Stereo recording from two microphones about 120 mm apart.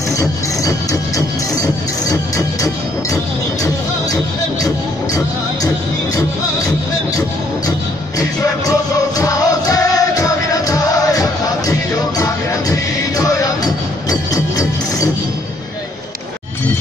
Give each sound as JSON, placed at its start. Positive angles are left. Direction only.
{"t": 0.2, "sound": "music", "side_deg": 30}
{"t": 4.6, "sound": "music", "side_deg": 30}
{"t": 8.2, "sound": "music", "side_deg": 30}
{"t": 13.2, "sound": "music", "side_deg": 30}